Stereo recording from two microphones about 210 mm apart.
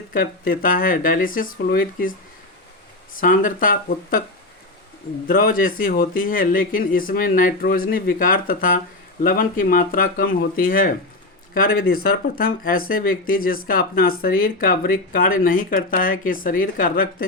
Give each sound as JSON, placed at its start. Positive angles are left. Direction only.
{"t": 0.1, "sound": "speech", "side_deg": 45}
{"t": 3.2, "sound": "speech", "side_deg": 40}
{"t": 5.3, "sound": "speech", "side_deg": 40}